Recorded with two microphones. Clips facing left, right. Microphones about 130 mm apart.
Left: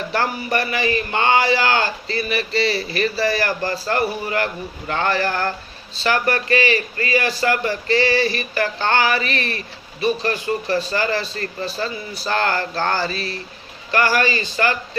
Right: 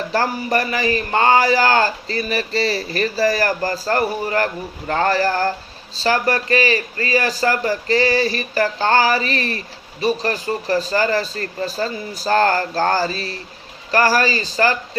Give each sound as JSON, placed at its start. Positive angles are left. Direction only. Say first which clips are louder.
{"t": 0.1, "sound": "a man's voice", "louder": "right 2 dB", "side_deg": -40}